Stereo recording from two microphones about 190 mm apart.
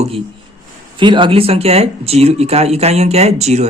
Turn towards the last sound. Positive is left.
turn(degrees=-35)  # may be behind; listen again after turning